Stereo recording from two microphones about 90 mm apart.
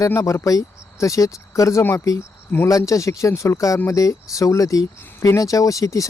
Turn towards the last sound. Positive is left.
turn(degrees=40)  # may be behind; listen again after turning